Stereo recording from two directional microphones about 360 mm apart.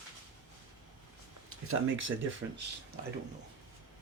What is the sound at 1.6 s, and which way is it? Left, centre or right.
Speech, right.